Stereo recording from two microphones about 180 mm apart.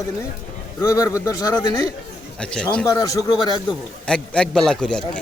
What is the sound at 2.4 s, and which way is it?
Speech, 5° left (ahead or behind).